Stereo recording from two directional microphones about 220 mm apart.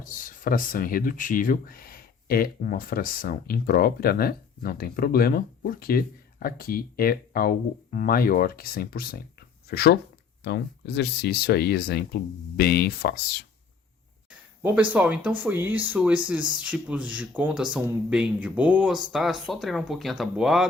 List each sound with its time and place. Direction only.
0.0 s speech: 40° left (ahead or behind)
14.9 s speech: 5° right (ahead or behind)